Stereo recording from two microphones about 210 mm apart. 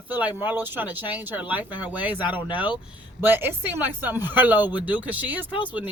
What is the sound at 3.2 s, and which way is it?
Speech, 10° right (ahead or behind).